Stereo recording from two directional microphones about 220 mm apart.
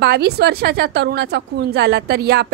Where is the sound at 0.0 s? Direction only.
45° right (ahead or behind).